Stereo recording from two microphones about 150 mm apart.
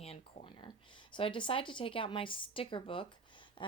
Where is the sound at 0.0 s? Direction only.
40° left (ahead or behind).